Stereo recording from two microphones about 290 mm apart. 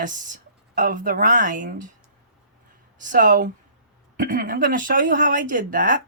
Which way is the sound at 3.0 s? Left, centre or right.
Right.